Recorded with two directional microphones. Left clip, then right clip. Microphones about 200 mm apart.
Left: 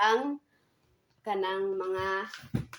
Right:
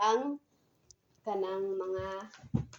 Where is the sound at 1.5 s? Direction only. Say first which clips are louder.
Left 3 dB; 25° left (ahead or behind).